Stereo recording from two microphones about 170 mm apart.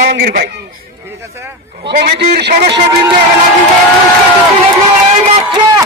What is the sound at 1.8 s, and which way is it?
Speech, 70° right (ahead or behind).